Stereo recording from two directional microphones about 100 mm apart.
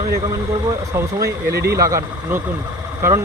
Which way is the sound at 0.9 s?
30° right (ahead or behind).